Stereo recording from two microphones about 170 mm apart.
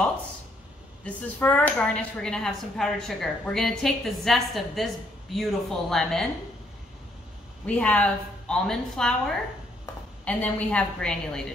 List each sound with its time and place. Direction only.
1.0 s speech: 10° left (ahead or behind)
7.6 s a woman's voice: 5° left (ahead or behind)
10.2 s a woman's voice: 5° left (ahead or behind)